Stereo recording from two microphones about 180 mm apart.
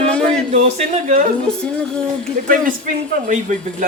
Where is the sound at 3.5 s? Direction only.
40° right (ahead or behind).